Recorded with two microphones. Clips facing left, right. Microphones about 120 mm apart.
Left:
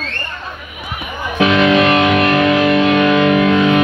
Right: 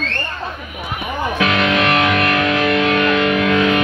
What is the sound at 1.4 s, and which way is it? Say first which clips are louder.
Music: left 6 dB; 25° left (ahead or behind).